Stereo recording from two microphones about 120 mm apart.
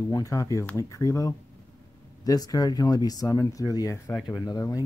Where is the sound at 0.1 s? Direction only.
30° left (ahead or behind).